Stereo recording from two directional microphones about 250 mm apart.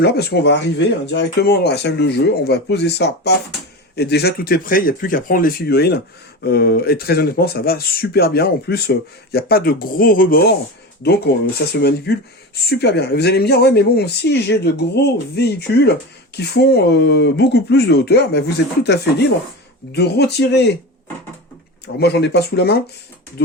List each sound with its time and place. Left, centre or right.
0.0 s speech: left
21.9 s speech: left